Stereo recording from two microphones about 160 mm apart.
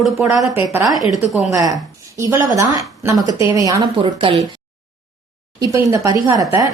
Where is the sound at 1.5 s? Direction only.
20° right (ahead or behind).